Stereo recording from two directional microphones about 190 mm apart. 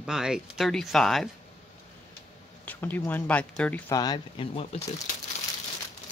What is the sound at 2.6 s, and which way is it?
Speech, 10° left (ahead or behind).